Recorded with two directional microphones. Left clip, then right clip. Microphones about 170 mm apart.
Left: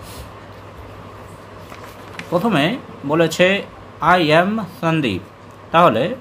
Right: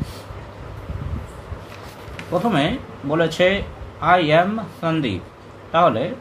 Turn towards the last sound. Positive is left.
turn(degrees=45)  # may be behind; listen again after turning